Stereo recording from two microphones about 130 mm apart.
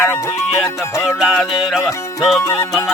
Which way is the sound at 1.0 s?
5° right (ahead or behind).